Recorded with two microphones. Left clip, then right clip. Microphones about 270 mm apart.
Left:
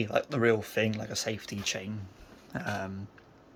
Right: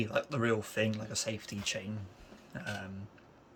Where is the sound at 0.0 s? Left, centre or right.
Centre.